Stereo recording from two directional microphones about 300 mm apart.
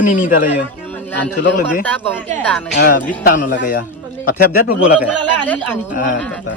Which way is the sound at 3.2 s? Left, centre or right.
Left.